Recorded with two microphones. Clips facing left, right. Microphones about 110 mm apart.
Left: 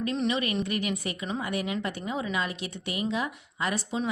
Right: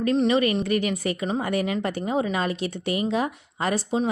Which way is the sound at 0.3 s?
50° right (ahead or behind).